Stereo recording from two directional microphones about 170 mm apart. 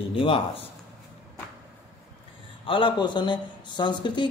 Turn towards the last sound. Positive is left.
turn(degrees=25)  # may be behind; listen again after turning